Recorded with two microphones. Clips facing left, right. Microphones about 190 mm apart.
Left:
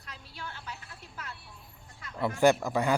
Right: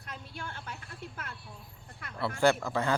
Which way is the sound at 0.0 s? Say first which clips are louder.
Right 2 dB; 50° right (ahead or behind).